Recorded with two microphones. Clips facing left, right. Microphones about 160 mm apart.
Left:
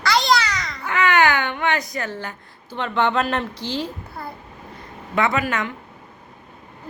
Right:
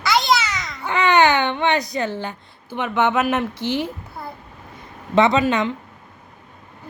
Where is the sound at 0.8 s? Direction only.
20° right (ahead or behind).